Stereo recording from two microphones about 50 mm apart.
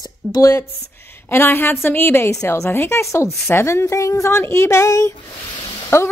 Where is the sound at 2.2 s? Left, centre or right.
Left.